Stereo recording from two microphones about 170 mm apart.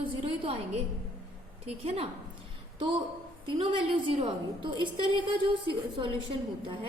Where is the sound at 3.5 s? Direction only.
30° right (ahead or behind).